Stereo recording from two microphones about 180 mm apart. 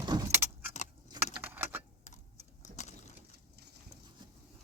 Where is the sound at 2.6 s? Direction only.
40° left (ahead or behind).